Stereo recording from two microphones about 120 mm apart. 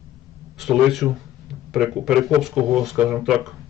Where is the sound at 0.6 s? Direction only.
Centre (ahead or behind).